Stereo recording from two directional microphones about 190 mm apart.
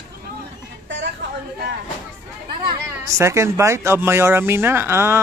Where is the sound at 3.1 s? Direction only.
15° right (ahead or behind).